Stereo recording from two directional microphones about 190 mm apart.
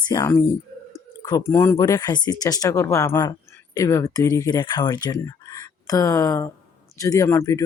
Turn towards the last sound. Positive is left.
turn(degrees=15)  # may be behind; listen again after turning